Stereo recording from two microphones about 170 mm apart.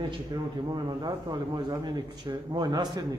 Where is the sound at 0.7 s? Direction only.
25° right (ahead or behind).